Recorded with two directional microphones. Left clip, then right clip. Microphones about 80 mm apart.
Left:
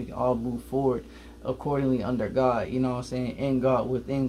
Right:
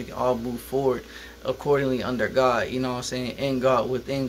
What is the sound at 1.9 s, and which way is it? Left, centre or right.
Speech, centre.